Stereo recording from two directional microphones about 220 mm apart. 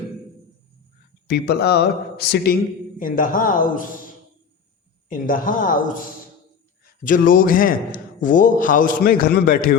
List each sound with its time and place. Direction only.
1.3 s a man's voice: 45° left (ahead or behind)
5.0 s a man's voice: 40° left (ahead or behind)